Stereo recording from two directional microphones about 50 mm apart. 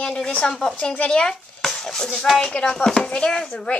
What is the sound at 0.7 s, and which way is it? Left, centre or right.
Speech, left.